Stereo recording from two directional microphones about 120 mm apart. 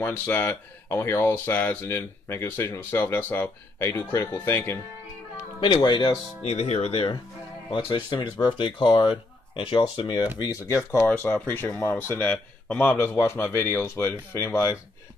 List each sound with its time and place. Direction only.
0.0 s a man's voice: 15° left (ahead or behind)
5.6 s speech: 40° left (ahead or behind)
6.4 s speech: 60° left (ahead or behind)
7.7 s speech: 35° left (ahead or behind)
11.2 s a man's voice: 15° left (ahead or behind)